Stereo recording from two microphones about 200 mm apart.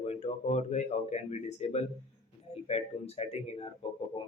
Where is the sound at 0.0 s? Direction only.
35° left (ahead or behind).